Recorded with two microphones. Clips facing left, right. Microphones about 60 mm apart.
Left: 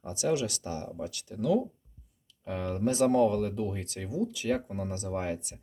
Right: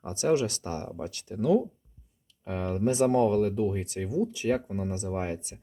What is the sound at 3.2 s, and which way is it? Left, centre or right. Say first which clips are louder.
Speech: right 2 dB; right.